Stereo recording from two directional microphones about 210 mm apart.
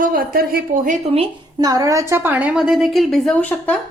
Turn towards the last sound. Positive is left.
turn(degrees=5)  # may be behind; listen again after turning